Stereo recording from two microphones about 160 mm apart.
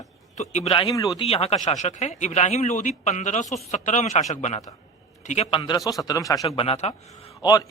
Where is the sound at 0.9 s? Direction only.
20° left (ahead or behind).